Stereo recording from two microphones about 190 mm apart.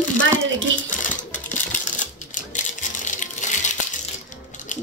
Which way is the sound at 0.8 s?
40° left (ahead or behind).